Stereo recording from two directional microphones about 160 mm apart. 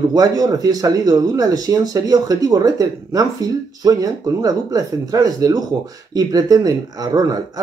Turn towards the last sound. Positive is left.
turn(degrees=-25)  # may be behind; listen again after turning